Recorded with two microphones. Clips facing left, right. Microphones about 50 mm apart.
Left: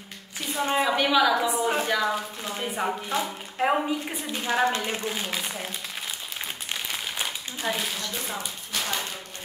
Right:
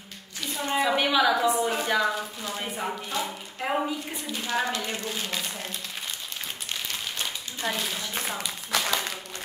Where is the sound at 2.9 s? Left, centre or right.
Left.